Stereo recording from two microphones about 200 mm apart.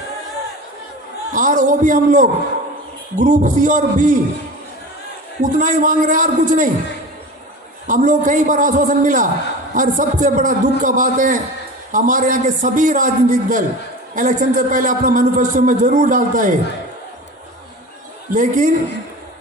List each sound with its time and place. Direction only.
1.3 s a man's voice: 40° right (ahead or behind)
5.4 s a man's voice: 45° right (ahead or behind)
7.8 s a man's voice: 40° right (ahead or behind)
18.3 s a man's voice: 40° right (ahead or behind)